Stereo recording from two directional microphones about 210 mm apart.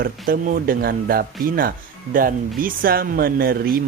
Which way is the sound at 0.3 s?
40° right (ahead or behind).